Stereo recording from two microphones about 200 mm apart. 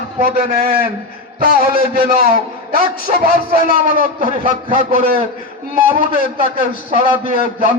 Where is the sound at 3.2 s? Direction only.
45° right (ahead or behind).